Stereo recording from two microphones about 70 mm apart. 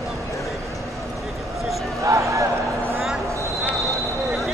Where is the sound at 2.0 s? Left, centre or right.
Right.